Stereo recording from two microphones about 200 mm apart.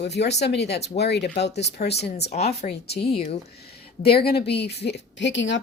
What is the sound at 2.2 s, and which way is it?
Speech, 30° left (ahead or behind).